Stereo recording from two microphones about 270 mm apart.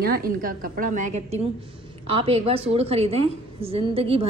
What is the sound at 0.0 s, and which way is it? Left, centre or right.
A woman's voice, right.